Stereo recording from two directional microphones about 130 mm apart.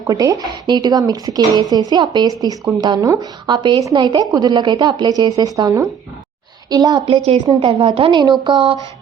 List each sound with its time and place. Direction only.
0.1 s a woman's voice: 25° right (ahead or behind)
7.6 s speech: 45° right (ahead or behind)